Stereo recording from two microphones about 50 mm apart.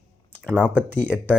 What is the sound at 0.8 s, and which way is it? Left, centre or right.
Speech, right.